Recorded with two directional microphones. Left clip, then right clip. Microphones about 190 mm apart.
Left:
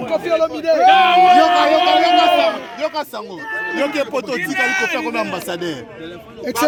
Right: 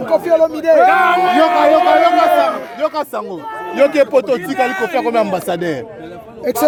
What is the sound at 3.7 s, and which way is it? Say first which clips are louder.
Speech: right 10 dB; 55° right (ahead or behind).